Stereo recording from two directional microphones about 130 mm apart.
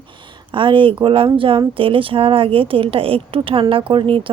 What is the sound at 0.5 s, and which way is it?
A woman's voice, 40° right (ahead or behind).